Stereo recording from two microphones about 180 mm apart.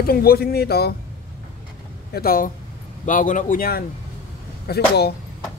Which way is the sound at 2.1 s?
55° left (ahead or behind).